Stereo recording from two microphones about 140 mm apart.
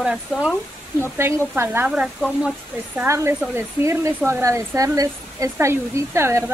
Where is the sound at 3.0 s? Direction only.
20° right (ahead or behind).